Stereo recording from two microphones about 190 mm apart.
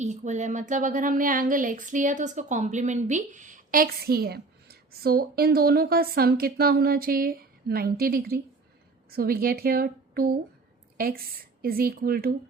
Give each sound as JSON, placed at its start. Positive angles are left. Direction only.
{"t": 0.0, "sound": "a woman's voice", "side_deg": -40}